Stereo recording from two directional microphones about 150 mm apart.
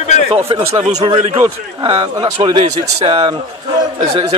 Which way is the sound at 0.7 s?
45° right (ahead or behind).